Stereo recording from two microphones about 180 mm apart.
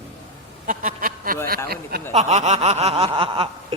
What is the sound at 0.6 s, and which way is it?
Speech, 45° right (ahead or behind).